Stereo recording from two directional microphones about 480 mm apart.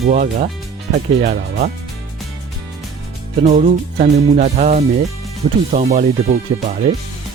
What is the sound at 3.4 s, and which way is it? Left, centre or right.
Music, centre.